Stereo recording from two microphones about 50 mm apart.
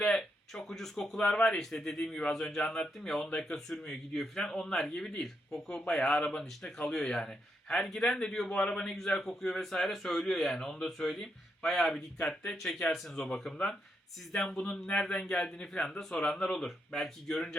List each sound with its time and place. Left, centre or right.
0.0 s a sound: centre
1.5 s a man's voice: centre
8.4 s a man's voice: left; by 17.3 s centre
17.3 s a man's voice: centre